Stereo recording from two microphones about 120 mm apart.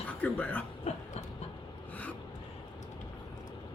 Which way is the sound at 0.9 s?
65° left (ahead or behind).